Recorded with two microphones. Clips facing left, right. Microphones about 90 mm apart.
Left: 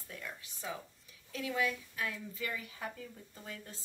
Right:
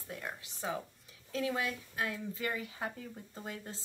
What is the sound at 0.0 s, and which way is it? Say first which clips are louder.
Speech: right 4 dB; 35° right (ahead or behind).